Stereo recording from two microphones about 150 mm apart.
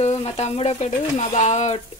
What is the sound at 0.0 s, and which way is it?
Speech, 45° left (ahead or behind).